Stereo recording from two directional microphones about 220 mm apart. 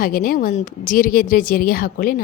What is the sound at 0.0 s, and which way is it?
A woman's voice, 40° left (ahead or behind).